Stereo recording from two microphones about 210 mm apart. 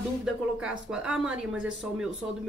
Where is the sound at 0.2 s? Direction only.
5° right (ahead or behind).